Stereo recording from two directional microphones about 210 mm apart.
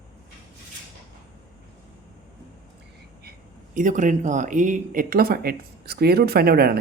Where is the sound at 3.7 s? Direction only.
40° right (ahead or behind).